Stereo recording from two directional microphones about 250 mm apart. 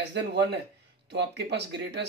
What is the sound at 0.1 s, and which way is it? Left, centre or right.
Speech, right.